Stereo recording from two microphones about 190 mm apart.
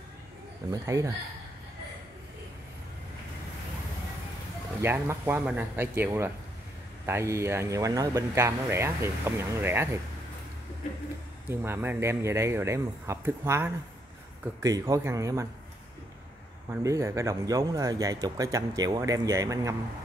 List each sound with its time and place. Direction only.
0.7 s speech: 15° right (ahead or behind)
4.8 s speech: 10° right (ahead or behind)
11.4 s speech: 10° right (ahead or behind)
16.7 s speech: 15° right (ahead or behind)